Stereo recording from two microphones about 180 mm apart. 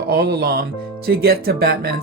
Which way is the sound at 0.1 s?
60° right (ahead or behind).